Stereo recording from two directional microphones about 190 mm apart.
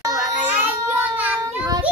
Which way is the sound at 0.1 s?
5° right (ahead or behind).